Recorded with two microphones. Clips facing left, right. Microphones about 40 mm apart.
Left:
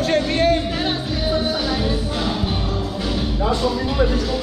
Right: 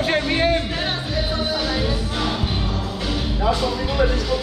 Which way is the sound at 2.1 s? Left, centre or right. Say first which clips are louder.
Left 1 dB; centre.